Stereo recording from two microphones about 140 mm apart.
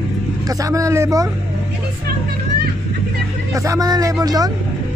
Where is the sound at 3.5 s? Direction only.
25° right (ahead or behind).